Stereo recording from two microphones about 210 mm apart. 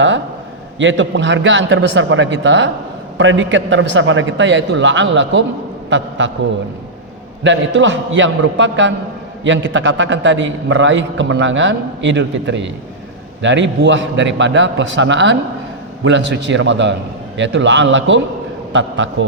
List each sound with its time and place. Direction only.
0.8 s a man's voice: 60° right (ahead or behind)
7.4 s a man's voice: 60° right (ahead or behind)